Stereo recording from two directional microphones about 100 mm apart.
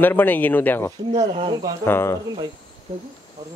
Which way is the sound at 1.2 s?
90° right.